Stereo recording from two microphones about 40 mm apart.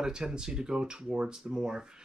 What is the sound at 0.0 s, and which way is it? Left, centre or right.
Speech, centre.